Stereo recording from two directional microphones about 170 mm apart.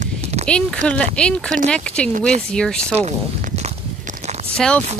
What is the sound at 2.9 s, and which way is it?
Speech, 40° right (ahead or behind).